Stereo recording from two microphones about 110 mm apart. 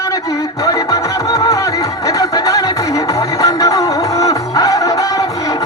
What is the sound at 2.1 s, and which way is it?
Music, 30° left (ahead or behind).